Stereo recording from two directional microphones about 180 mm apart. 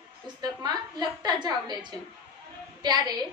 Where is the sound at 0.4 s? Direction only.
20° right (ahead or behind).